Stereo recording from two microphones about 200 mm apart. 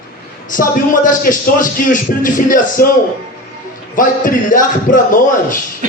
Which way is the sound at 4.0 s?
40° left (ahead or behind).